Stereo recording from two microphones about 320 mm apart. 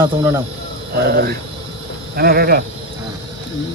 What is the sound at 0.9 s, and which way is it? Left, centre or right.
Speech, right.